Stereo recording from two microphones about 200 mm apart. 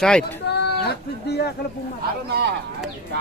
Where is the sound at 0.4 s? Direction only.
55° left (ahead or behind).